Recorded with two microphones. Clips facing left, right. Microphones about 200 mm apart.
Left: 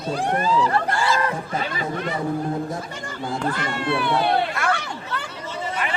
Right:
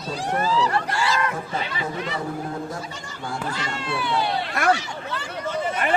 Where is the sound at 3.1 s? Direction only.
55° left (ahead or behind).